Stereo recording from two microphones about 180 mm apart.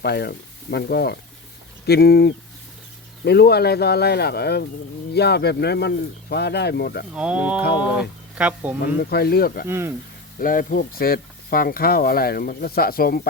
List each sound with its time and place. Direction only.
0.0 s stir: 65° left (ahead or behind)
7.1 s speech: 5° right (ahead or behind)
9.0 s stir: 60° left (ahead or behind)
9.6 s speech: 15° right (ahead or behind)
10.4 s stir: 50° left (ahead or behind)